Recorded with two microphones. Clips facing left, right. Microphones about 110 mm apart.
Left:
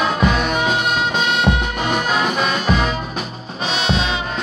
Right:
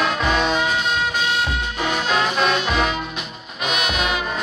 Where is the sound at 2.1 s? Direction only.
5° left (ahead or behind).